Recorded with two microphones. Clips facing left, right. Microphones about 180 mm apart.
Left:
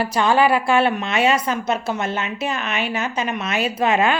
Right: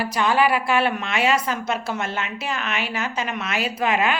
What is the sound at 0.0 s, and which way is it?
Speech, 30° left (ahead or behind).